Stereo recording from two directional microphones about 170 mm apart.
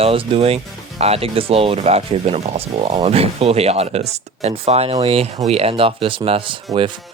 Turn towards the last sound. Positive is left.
turn(degrees=-30)  # may be behind; listen again after turning